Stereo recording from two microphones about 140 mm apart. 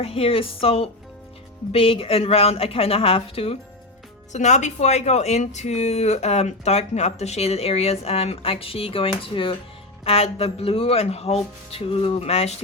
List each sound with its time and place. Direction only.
0.0 s speech: 45° left (ahead or behind)
4.3 s speech: 55° left (ahead or behind)